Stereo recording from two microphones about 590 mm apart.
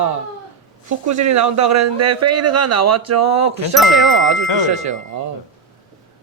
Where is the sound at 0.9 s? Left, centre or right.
Right.